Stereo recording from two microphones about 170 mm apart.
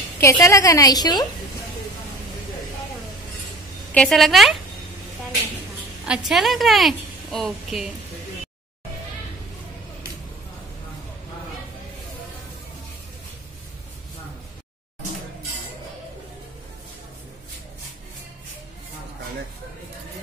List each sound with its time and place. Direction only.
0.2 s a woman's voice: 15° left (ahead or behind)
3.9 s a woman's voice: 5° left (ahead or behind)
6.0 s a woman's voice: 5° right (ahead or behind)